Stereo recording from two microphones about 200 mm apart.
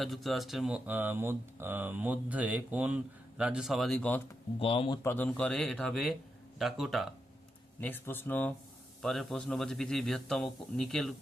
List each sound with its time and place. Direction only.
0.0 s speech: centre (ahead or behind)
4.6 s speech: 25° left (ahead or behind)
5.0 s speech: 10° left (ahead or behind)
7.8 s speech: 10° left (ahead or behind)